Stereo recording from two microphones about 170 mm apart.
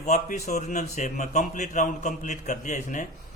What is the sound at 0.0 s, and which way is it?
A man's voice, 40° left (ahead or behind).